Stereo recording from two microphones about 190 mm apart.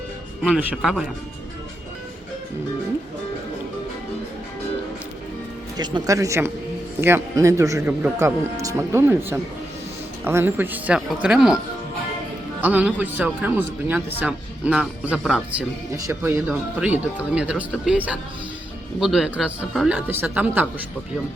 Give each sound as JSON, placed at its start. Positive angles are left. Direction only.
{"t": 0.4, "sound": "speech", "side_deg": -5}
{"t": 5.7, "sound": "speech", "side_deg": -20}
{"t": 12.6, "sound": "speech", "side_deg": -10}
{"t": 16.0, "sound": "speech", "side_deg": -15}